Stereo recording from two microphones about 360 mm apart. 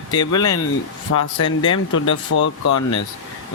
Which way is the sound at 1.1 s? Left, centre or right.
Left.